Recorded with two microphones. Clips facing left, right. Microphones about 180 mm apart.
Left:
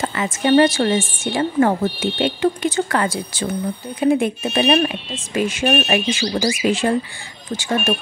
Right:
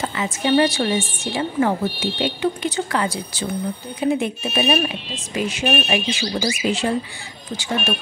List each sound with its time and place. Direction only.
0.1 s a woman's voice: 50° left (ahead or behind)
4.1 s a woman's voice: 50° left (ahead or behind)